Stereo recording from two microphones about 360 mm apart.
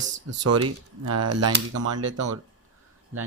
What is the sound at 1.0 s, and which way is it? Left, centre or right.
Speech, right.